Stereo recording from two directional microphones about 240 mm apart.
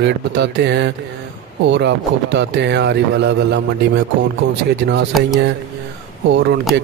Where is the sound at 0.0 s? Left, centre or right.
Right.